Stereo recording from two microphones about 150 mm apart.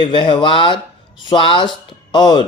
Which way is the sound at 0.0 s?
30° left (ahead or behind).